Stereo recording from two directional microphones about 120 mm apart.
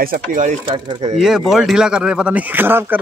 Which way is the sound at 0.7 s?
45° right (ahead or behind).